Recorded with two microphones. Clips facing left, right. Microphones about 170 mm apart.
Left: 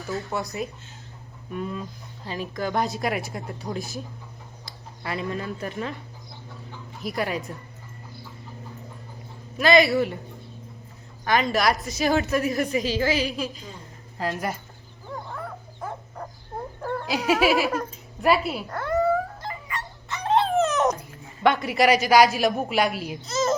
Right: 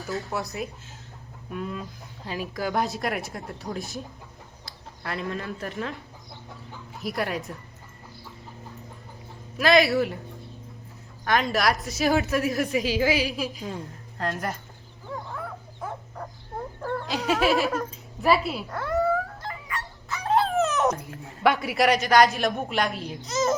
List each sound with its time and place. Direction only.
0.0 s a woman's voice: centre (ahead or behind)
7.0 s a woman's voice: centre (ahead or behind)
9.6 s a woman's voice: centre (ahead or behind)
11.3 s a woman's voice: centre (ahead or behind)
14.2 s a woman's voice: 5° left (ahead or behind)
15.0 s dog: centre (ahead or behind)
16.8 s a sound: 5° left (ahead or behind)
21.2 s a woman's voice: centre (ahead or behind)
23.2 s a child's voice: 15° right (ahead or behind)